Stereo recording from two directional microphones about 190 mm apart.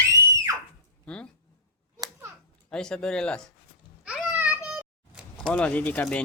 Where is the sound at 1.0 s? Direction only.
5° left (ahead or behind).